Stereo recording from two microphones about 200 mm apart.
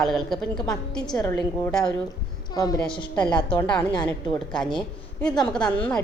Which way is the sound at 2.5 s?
20° left (ahead or behind).